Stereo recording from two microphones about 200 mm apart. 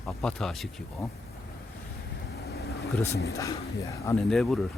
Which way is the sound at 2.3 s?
50° left (ahead or behind).